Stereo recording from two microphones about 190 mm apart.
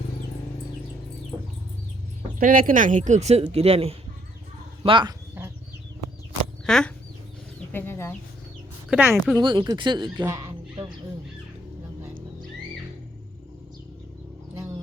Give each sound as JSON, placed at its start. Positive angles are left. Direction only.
{"t": 2.4, "sound": "speech", "side_deg": -45}
{"t": 6.7, "sound": "speech", "side_deg": 0}
{"t": 7.7, "sound": "chicken", "side_deg": 10}
{"t": 8.9, "sound": "speech", "side_deg": -5}
{"t": 9.4, "sound": "speech", "side_deg": -25}
{"t": 10.2, "sound": "music", "side_deg": -15}
{"t": 14.5, "sound": "music", "side_deg": -15}